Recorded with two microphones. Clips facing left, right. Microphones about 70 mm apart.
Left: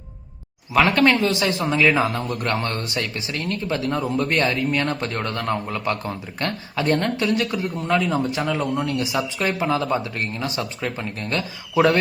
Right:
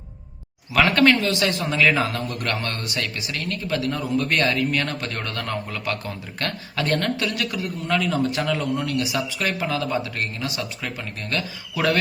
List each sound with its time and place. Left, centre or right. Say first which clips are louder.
0.9 s a man's voice: even; left